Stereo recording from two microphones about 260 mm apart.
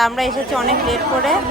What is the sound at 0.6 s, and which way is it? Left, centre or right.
Speech, right.